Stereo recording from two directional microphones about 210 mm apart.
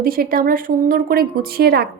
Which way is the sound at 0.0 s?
45° right (ahead or behind).